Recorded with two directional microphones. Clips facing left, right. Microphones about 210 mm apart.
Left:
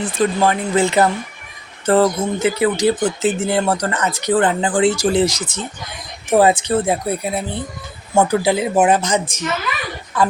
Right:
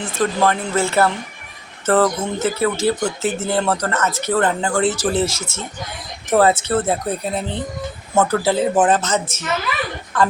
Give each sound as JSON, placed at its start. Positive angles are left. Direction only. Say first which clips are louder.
{"t": 0.0, "sound": "speech", "louder": "left 2 dB", "side_deg": 15}